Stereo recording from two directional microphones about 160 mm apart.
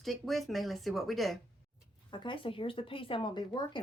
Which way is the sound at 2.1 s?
30° left (ahead or behind).